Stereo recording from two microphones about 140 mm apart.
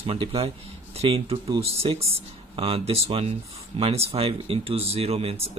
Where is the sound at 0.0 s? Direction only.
40° right (ahead or behind).